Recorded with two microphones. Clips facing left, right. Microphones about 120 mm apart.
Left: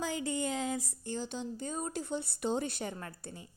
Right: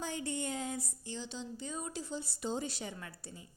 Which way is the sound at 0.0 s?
90° left.